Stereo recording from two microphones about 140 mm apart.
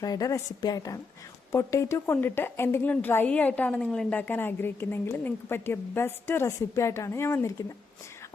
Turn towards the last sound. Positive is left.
turn(degrees=20)  # may be behind; listen again after turning